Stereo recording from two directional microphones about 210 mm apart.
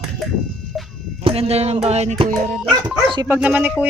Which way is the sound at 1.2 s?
30° right (ahead or behind).